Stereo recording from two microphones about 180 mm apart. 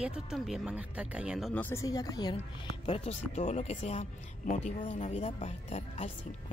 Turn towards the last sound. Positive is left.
turn(degrees=35)  # may be behind; listen again after turning